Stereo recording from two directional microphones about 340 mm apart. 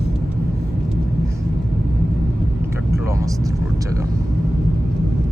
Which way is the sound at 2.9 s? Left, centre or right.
Centre.